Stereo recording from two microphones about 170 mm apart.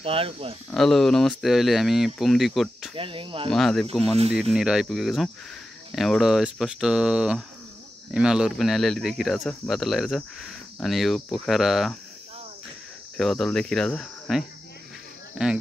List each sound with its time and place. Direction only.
0.0 s speech: 35° right (ahead or behind)
0.7 s speech: centre (ahead or behind)
3.0 s speech: 30° right (ahead or behind)
3.4 s speech: centre (ahead or behind)
13.2 s speech: centre (ahead or behind)